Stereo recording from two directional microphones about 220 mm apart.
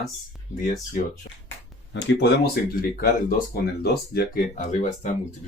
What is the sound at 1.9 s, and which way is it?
Speech, 55° left (ahead or behind).